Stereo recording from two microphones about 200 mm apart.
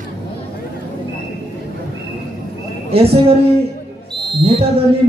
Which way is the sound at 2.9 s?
30° right (ahead or behind).